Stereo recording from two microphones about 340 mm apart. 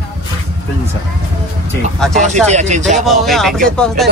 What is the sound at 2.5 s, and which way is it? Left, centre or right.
Speech, centre.